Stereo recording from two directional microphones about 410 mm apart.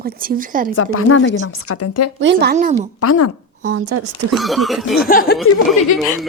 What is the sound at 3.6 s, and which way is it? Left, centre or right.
Speech, right.